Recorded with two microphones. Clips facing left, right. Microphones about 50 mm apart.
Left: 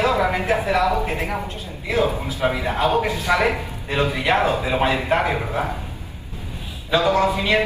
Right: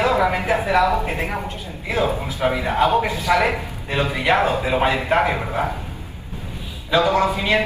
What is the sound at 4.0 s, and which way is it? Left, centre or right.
Speech, right.